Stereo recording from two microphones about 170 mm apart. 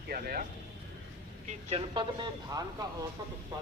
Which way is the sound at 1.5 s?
40° right (ahead or behind).